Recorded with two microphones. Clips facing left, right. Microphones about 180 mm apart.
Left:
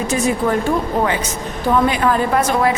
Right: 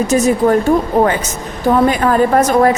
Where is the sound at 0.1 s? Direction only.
40° right (ahead or behind).